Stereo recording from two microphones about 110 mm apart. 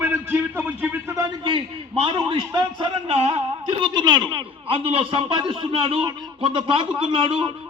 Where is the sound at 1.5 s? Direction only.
55° right (ahead or behind).